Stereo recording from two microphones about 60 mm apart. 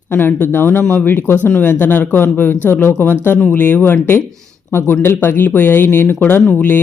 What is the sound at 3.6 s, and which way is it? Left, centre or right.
Speech, left.